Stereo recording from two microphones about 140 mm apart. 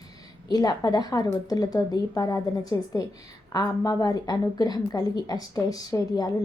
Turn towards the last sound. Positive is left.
turn(degrees=25)  # may be behind; listen again after turning